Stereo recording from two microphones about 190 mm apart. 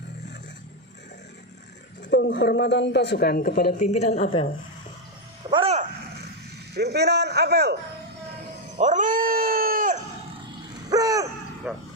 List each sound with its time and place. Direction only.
2.0 s speech: 65° left (ahead or behind); by 4.4 s 35° left (ahead or behind)
5.5 s a sound: 30° right (ahead or behind)
6.7 s a man's voice: 60° right (ahead or behind)
8.8 s dog: 40° right (ahead or behind)
10.8 s dog: 20° right (ahead or behind)
11.6 s speech: 10° right (ahead or behind)